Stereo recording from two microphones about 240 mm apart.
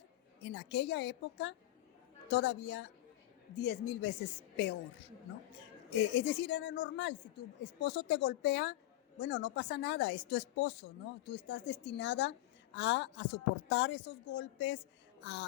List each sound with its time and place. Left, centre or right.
0.4 s a woman's voice: left
6.0 s a woman's voice: left